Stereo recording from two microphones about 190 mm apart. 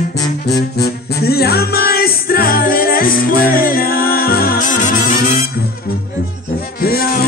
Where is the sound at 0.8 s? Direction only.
55° left (ahead or behind).